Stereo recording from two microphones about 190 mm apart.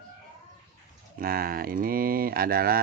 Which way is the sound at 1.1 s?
50° right (ahead or behind).